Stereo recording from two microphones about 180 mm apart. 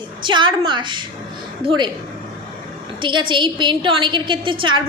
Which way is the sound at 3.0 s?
25° right (ahead or behind).